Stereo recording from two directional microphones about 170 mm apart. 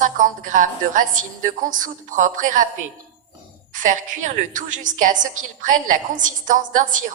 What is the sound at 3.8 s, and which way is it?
A woman's voice, 50° right (ahead or behind).